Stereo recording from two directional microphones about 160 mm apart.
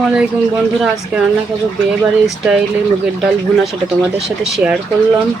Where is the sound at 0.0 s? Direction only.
5° right (ahead or behind).